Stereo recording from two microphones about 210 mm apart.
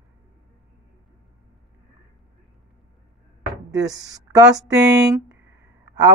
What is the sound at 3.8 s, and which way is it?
Speech, 15° right (ahead or behind).